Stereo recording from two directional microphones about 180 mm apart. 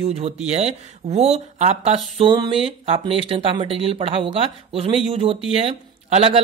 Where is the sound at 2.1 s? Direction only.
25° right (ahead or behind).